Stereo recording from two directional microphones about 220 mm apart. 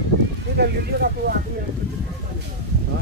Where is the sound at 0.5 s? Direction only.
45° right (ahead or behind).